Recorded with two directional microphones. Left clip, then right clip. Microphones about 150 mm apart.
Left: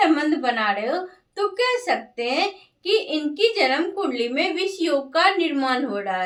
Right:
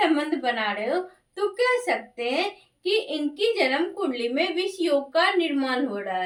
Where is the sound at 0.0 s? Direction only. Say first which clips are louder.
Left 4 dB; 25° left (ahead or behind).